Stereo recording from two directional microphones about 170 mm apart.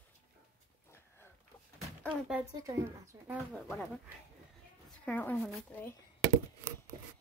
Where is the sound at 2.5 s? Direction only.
20° right (ahead or behind).